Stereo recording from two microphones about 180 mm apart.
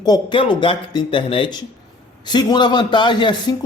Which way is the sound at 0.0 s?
25° left (ahead or behind).